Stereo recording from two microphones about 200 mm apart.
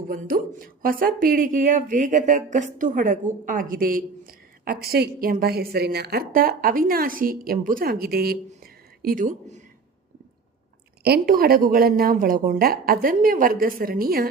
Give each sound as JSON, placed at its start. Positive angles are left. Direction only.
{"t": 0.1, "sound": "speech", "side_deg": -45}
{"t": 11.0, "sound": "speech", "side_deg": -50}